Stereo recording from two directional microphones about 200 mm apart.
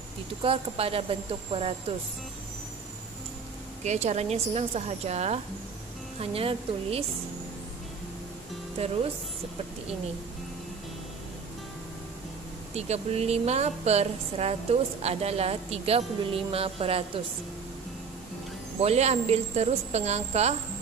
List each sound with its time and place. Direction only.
0.4 s speech: 30° right (ahead or behind)
3.8 s a woman's voice: 35° right (ahead or behind)
12.7 s a woman's voice: 30° right (ahead or behind)
18.8 s a woman's voice: 30° right (ahead or behind)